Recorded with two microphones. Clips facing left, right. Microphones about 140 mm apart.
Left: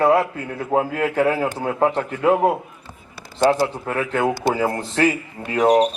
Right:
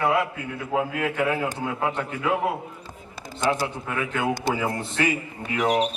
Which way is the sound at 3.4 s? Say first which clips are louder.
Left 7 dB; 35° left (ahead or behind).